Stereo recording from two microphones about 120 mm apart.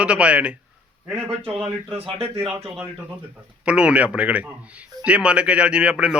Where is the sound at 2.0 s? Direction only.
50° right (ahead or behind).